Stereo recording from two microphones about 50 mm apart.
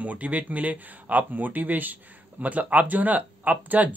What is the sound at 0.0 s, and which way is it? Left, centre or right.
Speech, right.